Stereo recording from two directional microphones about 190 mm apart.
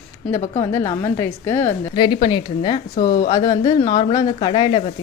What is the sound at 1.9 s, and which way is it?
A woman's voice, 25° left (ahead or behind).